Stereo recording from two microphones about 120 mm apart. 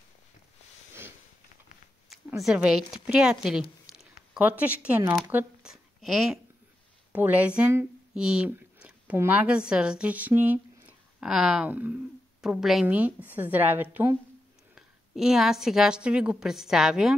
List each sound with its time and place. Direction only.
2.0 s a woman's voice: 5° right (ahead or behind)
5.7 s a woman's voice: centre (ahead or behind)
7.1 s a woman's voice: 15° right (ahead or behind)
14.8 s a woman's voice: 5° right (ahead or behind)